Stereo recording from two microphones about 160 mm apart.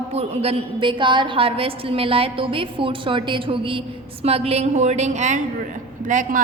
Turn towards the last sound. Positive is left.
turn(degrees=-55)  # may be behind; listen again after turning